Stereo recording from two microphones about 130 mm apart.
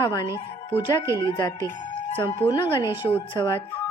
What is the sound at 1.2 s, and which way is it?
Speech, 35° left (ahead or behind).